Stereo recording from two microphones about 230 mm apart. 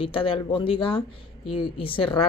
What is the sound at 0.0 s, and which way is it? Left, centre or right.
Speech, left.